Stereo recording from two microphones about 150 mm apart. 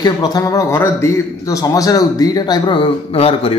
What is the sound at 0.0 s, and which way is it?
A man's voice, 25° left (ahead or behind).